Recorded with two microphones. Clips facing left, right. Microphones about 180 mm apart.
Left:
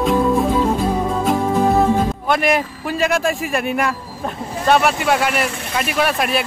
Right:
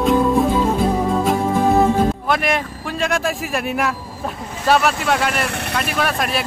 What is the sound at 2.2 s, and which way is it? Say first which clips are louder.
A man's voice: left 2 dB; centre (ahead or behind).